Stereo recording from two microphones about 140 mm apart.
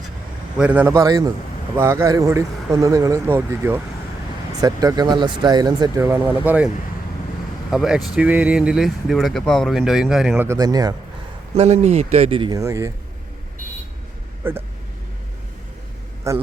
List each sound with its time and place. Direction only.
0.5 s speech: 10° right (ahead or behind)
0.9 s speech: 25° right (ahead or behind)
4.6 s speech: 25° right (ahead or behind)
6.1 s speech: 15° right (ahead or behind)
7.7 s speech: 5° right (ahead or behind)
10.4 s speech: 25° right (ahead or behind)
11.5 s speech: 50° right (ahead or behind)
12.5 s speech: 20° right (ahead or behind)
14.4 s speech: 15° right (ahead or behind)
16.3 s speech: 20° right (ahead or behind)